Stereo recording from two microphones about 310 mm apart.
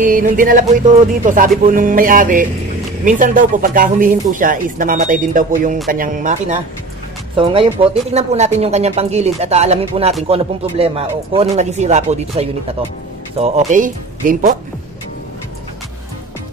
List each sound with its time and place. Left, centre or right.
0.0 s speech: right